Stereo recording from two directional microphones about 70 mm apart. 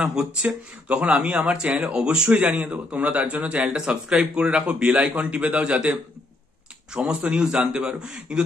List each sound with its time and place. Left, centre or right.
0.0 s speech: centre
7.0 s speech: right